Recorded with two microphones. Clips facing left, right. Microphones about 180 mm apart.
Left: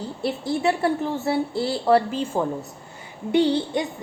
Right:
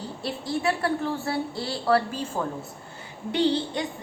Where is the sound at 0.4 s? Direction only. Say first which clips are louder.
Left 3 dB; 25° left (ahead or behind).